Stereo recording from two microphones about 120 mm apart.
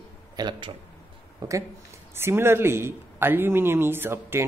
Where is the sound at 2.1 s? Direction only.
20° right (ahead or behind).